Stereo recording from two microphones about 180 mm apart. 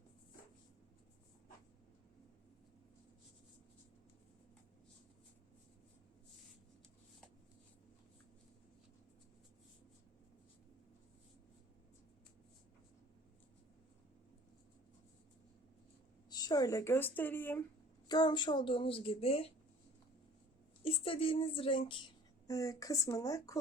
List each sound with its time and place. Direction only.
16.3 s speech: 20° left (ahead or behind)
18.1 s a woman's voice: 25° left (ahead or behind)
20.8 s a woman's voice: 30° left (ahead or behind)